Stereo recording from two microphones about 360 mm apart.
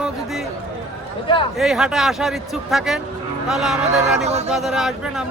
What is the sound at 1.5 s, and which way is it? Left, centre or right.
A man's voice, centre.